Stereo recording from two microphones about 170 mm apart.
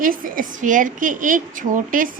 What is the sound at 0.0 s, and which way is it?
A woman's voice, 55° right (ahead or behind).